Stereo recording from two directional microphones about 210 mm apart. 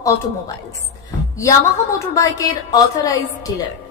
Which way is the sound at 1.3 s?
15° left (ahead or behind).